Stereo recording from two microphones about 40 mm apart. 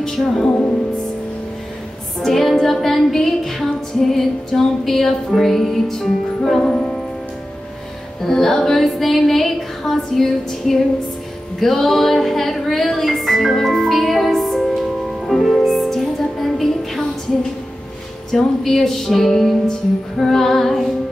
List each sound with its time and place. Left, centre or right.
0.0 s music: centre
2.1 s music: centre
6.6 s music: left
8.2 s music: centre
11.6 s music: centre
18.3 s music: centre